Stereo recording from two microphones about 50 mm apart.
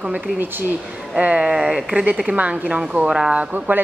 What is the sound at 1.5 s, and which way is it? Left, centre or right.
Speech, centre.